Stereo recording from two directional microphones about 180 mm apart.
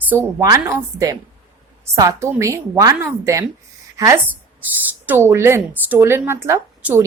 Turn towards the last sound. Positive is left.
turn(degrees=-15)  # may be behind; listen again after turning